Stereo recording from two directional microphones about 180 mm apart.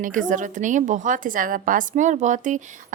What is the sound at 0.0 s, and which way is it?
A woman's voice, 45° right (ahead or behind).